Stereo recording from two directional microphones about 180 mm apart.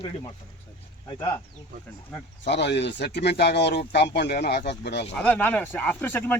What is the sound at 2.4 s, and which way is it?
Speech, 75° left (ahead or behind).